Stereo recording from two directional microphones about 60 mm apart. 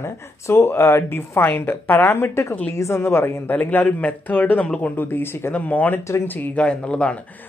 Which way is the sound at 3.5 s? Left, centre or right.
Left.